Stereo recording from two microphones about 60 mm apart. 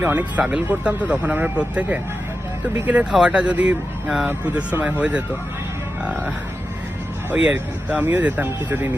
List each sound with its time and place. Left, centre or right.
0.0 s speech: right
3.1 s speech: centre
3.5 s speech: right
7.3 s speech: right